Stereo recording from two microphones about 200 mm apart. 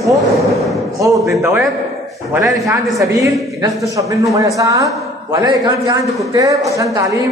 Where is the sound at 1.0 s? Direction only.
15° right (ahead or behind).